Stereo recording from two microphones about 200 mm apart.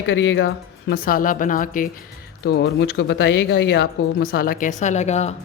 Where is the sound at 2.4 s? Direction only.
55° left (ahead or behind).